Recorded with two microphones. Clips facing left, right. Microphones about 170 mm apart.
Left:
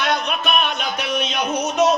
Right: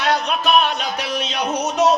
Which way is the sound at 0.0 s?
35° right (ahead or behind).